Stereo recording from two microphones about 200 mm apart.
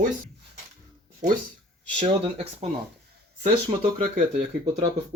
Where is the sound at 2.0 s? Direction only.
30° right (ahead or behind).